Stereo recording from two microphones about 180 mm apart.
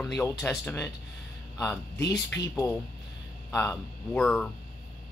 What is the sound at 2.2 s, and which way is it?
A man's voice, 20° left (ahead or behind).